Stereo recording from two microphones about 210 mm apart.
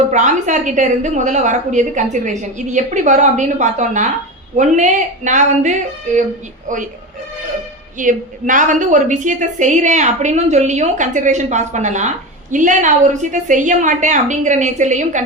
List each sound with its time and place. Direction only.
0.1 s a woman's voice: 35° right (ahead or behind)
7.9 s a woman's voice: 40° right (ahead or behind)